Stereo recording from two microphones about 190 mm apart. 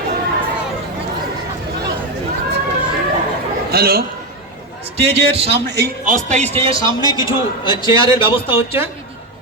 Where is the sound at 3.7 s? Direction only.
55° right (ahead or behind).